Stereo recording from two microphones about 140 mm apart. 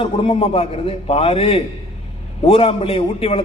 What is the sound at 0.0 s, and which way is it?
A man's voice, 40° left (ahead or behind).